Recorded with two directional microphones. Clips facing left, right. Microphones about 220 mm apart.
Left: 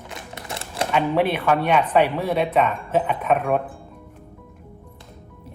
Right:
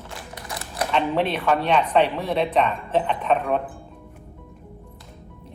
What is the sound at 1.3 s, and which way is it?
Speech, 5° left (ahead or behind).